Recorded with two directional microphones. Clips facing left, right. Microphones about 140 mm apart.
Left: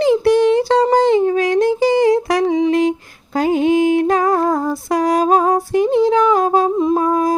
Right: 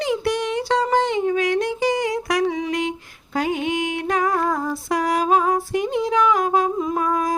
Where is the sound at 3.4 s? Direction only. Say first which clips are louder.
Left 8 dB; 35° left (ahead or behind).